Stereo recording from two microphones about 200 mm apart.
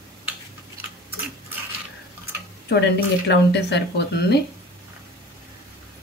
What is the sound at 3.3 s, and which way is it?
Speech, 60° left (ahead or behind).